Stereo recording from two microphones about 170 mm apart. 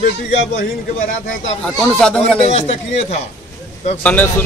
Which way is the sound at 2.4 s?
35° left (ahead or behind).